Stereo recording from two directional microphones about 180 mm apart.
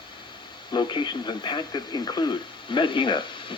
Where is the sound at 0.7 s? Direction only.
25° left (ahead or behind).